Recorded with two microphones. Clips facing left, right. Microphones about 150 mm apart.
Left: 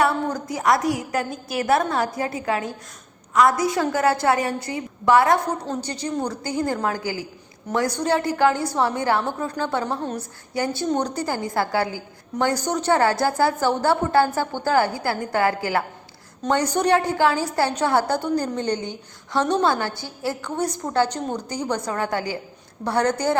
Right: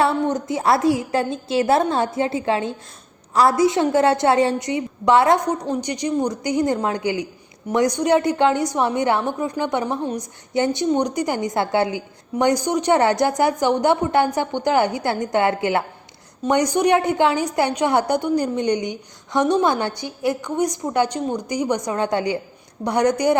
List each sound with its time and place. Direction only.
0.0 s a woman's voice: 25° right (ahead or behind)